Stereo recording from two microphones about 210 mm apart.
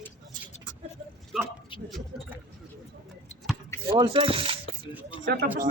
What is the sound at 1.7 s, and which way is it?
Speech, 25° left (ahead or behind).